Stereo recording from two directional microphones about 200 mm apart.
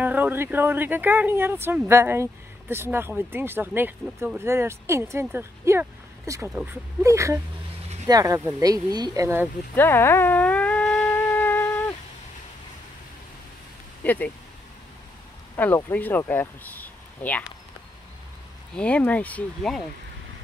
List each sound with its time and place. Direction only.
0.0 s speech: 10° right (ahead or behind)
9.8 s a sound: 10° left (ahead or behind)
14.0 s speech: 10° left (ahead or behind)
15.5 s speech: 10° left (ahead or behind)
18.8 s speech: 5° left (ahead or behind)